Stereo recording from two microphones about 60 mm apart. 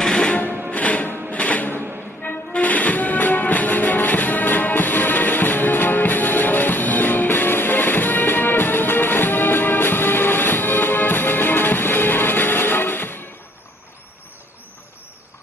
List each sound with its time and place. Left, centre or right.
0.0 s music: centre; by 13.3 s left